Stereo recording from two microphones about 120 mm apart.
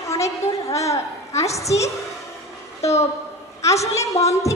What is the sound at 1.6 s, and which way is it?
Speech, 25° left (ahead or behind).